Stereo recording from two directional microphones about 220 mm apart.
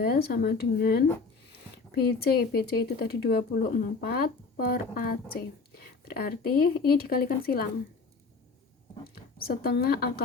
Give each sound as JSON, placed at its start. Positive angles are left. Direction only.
{"t": 0.0, "sound": "speech", "side_deg": 45}
{"t": 9.1, "sound": "speech", "side_deg": 45}